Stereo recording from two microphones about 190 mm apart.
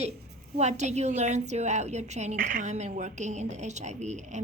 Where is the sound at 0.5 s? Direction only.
35° right (ahead or behind).